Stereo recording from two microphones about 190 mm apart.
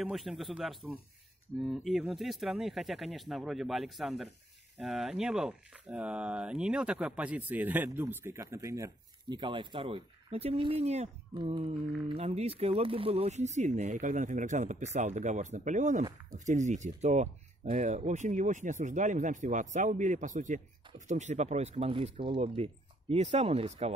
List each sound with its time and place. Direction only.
0.0 s speech: centre (ahead or behind); by 23.9 s 35° right (ahead or behind)